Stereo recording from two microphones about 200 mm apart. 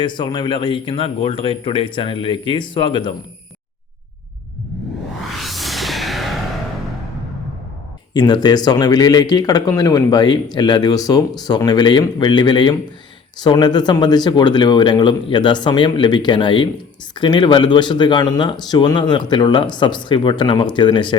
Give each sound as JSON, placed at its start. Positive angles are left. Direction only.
{"t": 0.0, "sound": "speech", "side_deg": 25}
{"t": 5.3, "sound": "music", "side_deg": 0}
{"t": 8.1, "sound": "speech", "side_deg": 20}